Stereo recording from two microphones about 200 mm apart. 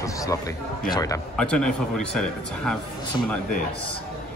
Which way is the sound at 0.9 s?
15° left (ahead or behind).